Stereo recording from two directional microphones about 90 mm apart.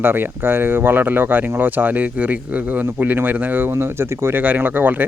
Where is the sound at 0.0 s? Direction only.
25° right (ahead or behind).